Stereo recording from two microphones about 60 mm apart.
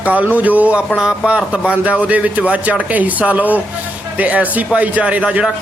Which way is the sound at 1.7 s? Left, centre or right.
Right.